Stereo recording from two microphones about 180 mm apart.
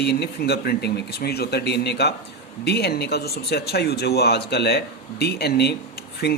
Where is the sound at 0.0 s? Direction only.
65° left (ahead or behind).